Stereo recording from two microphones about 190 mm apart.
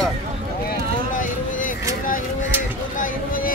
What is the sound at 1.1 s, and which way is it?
Speech, 45° left (ahead or behind).